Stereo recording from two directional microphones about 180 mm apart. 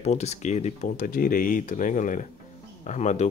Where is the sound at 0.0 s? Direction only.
35° left (ahead or behind).